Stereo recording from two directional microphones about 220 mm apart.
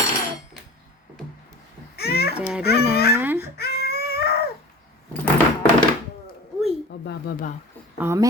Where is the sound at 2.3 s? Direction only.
5° right (ahead or behind).